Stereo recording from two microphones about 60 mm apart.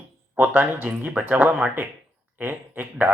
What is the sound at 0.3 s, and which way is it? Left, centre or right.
Speech, right.